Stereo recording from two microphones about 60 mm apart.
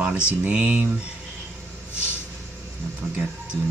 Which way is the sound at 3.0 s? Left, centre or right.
Centre.